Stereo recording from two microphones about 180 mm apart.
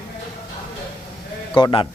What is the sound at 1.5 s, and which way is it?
Speech, 25° left (ahead or behind).